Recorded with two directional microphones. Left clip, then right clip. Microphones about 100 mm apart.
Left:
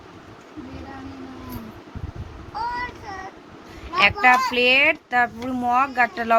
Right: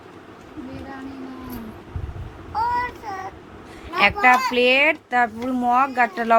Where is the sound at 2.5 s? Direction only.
20° left (ahead or behind).